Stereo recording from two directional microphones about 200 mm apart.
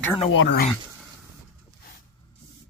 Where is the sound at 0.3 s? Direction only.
70° left (ahead or behind).